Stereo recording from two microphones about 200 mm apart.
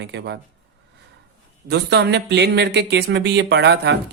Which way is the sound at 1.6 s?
55° right (ahead or behind).